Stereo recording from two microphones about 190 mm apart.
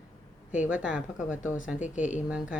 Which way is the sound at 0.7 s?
5° right (ahead or behind).